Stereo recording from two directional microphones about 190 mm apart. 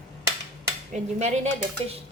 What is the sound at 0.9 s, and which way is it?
Speech, 35° right (ahead or behind).